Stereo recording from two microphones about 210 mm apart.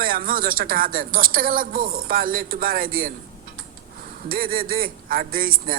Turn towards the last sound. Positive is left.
turn(degrees=-45)  # may be behind; listen again after turning